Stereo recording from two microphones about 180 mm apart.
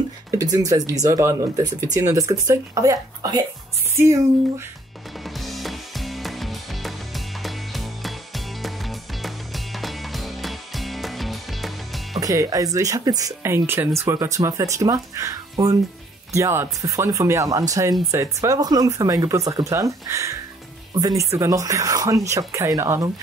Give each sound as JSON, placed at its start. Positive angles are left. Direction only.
{"t": 0.3, "sound": "speech", "side_deg": -20}
{"t": 5.4, "sound": "music", "side_deg": 0}
{"t": 7.4, "sound": "ratchet", "side_deg": 0}
{"t": 8.6, "sound": "music", "side_deg": 0}
{"t": 12.2, "sound": "speech", "side_deg": -20}